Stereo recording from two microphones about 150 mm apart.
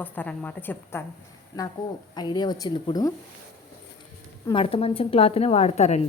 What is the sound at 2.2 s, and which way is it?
Speech, 30° left (ahead or behind).